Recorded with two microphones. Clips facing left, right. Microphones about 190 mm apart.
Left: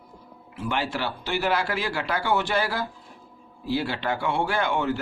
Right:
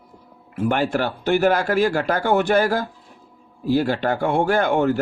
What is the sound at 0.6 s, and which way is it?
Speech, 50° right (ahead or behind).